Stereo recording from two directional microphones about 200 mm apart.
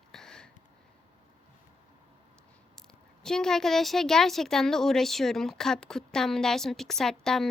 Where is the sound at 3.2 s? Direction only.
5° left (ahead or behind).